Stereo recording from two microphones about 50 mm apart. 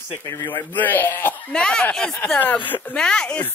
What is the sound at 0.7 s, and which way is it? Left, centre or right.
Speech, left.